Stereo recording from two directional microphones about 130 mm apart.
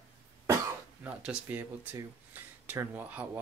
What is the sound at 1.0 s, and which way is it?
Speech, 10° right (ahead or behind).